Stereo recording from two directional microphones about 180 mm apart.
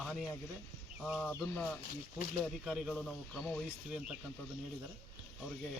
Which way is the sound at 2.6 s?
5° right (ahead or behind).